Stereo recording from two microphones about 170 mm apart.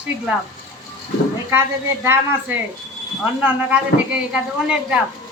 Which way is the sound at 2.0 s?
15° right (ahead or behind).